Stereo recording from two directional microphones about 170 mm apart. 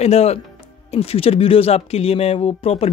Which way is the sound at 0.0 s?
40° left (ahead or behind).